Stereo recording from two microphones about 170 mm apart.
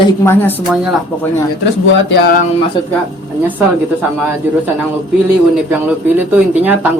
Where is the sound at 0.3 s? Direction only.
10° left (ahead or behind).